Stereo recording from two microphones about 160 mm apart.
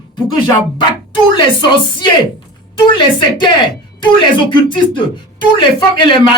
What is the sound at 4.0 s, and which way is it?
Speech, 30° left (ahead or behind).